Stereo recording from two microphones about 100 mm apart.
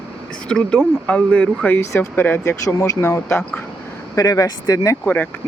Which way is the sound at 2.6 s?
30° left (ahead or behind).